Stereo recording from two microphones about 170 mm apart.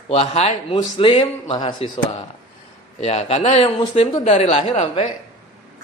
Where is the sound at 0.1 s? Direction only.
40° left (ahead or behind).